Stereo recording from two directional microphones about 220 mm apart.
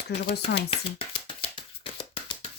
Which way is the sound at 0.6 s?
25° left (ahead or behind).